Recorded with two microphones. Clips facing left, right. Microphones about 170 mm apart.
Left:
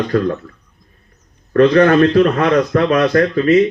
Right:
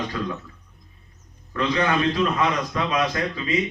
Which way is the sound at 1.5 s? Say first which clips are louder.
Left 13 dB; 60° left (ahead or behind).